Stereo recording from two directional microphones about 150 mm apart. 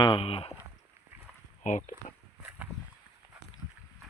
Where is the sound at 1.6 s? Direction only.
55° left (ahead or behind).